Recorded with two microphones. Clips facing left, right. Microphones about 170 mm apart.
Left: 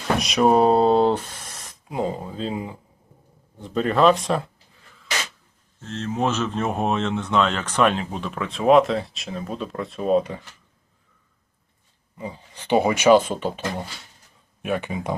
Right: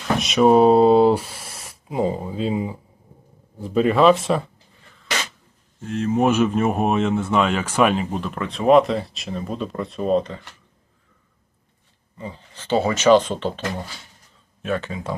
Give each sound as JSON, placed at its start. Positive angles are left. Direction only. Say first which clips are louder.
{"t": 0.2, "sound": "speech", "louder": "right 4 dB", "side_deg": 0}
{"t": 5.8, "sound": "speech", "louder": "right 5 dB", "side_deg": -10}
{"t": 12.1, "sound": "speech", "louder": "left 1 dB", "side_deg": 10}